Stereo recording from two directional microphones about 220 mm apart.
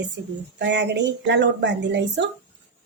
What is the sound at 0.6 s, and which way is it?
A woman's voice, 55° right (ahead or behind).